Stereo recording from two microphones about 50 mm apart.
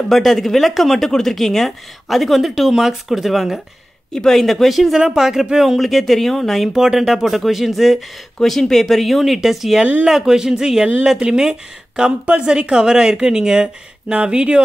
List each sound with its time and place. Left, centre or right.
0.1 s speech: centre
4.1 s speech: centre
8.4 s speech: centre